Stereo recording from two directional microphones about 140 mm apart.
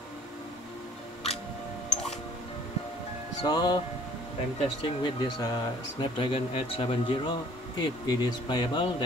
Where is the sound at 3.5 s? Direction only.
30° left (ahead or behind).